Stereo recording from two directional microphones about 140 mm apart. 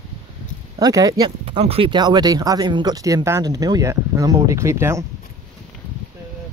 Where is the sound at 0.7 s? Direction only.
25° right (ahead or behind).